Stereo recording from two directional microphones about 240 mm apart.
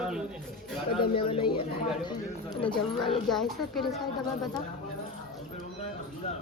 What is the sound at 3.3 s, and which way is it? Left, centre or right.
A woman's voice, centre.